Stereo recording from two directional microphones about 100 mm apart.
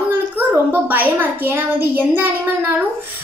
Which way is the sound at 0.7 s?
15° right (ahead or behind).